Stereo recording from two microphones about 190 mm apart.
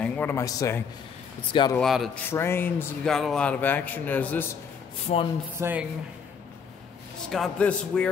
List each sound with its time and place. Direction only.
0.0 s speech: 10° left (ahead or behind); by 1.8 s 25° left (ahead or behind)
1.8 s a man's voice: centre (ahead or behind)
2.2 s speech: 10° left (ahead or behind)
5.1 s speech: 35° left (ahead or behind)
5.6 s speech: 10° right (ahead or behind)
7.2 s a man's voice: 5° left (ahead or behind)